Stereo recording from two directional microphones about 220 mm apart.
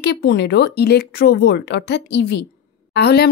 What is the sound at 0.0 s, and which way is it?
Speech, 50° left (ahead or behind).